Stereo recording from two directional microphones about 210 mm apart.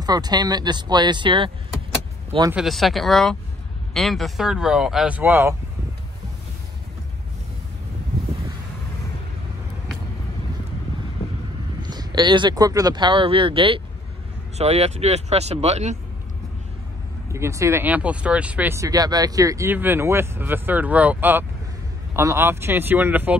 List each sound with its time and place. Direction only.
0.0 s speech: 20° right (ahead or behind)
2.5 s speech: centre (ahead or behind)
11.8 s speech: 20° right (ahead or behind)
17.3 s speech: 15° right (ahead or behind)